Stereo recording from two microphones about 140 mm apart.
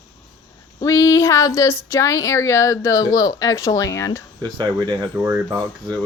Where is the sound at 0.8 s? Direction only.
20° left (ahead or behind).